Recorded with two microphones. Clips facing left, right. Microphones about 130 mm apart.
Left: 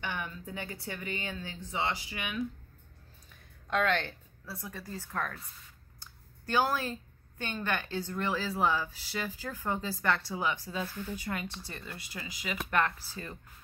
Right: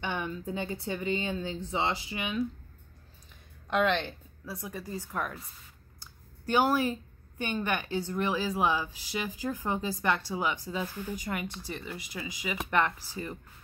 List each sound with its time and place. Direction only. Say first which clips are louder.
0.0 s speech: right 4 dB; 25° right (ahead or behind)
3.7 s a woman's voice: right 2 dB; 20° right (ahead or behind)